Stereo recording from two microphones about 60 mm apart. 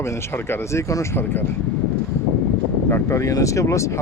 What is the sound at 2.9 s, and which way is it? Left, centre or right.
Speech, left.